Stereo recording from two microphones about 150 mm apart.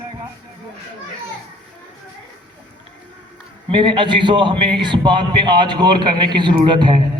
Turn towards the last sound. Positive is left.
turn(degrees=-30)  # may be behind; listen again after turning